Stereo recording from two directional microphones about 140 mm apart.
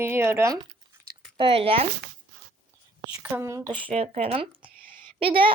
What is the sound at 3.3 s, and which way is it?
Speech, 20° right (ahead or behind).